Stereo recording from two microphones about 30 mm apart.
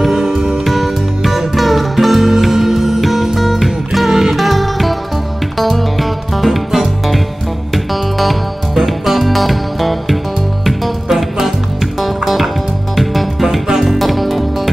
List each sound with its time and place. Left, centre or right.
0.3 s music: right
0.7 s music: centre